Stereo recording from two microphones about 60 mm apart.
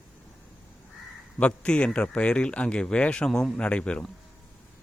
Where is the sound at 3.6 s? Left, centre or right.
Centre.